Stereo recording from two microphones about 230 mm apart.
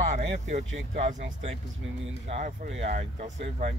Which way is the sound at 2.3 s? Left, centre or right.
Right.